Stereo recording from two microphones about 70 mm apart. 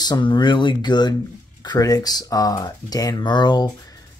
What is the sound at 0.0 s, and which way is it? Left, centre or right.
Speech, left.